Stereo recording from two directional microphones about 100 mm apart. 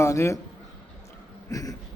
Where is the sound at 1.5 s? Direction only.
35° left (ahead or behind).